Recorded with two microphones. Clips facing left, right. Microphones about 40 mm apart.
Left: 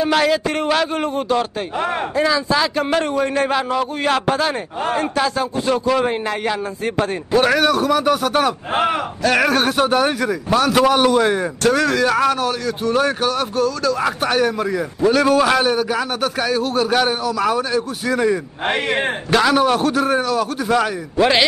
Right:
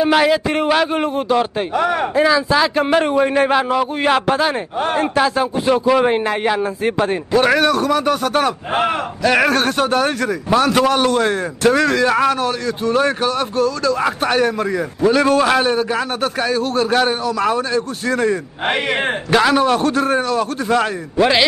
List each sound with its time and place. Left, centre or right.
0.0 s a man's voice: centre
1.8 s speech: right
2.1 s a man's voice: centre
7.3 s a man's voice: centre
9.6 s a man's voice: centre
11.6 s a man's voice: centre
18.7 s a man's voice: centre